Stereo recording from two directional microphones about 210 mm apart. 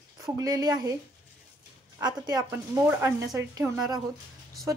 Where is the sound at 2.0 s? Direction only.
20° right (ahead or behind).